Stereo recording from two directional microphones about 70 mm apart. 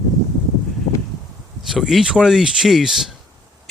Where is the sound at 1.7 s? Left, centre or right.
Centre.